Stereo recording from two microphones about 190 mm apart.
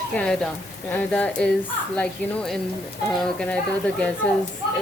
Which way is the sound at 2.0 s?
5° left (ahead or behind).